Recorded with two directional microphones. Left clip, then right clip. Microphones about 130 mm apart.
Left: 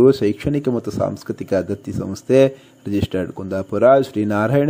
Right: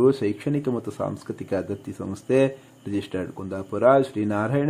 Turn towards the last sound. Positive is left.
turn(degrees=35)  # may be behind; listen again after turning